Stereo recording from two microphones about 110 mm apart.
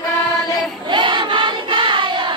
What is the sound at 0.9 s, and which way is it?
Choir, 45° right (ahead or behind).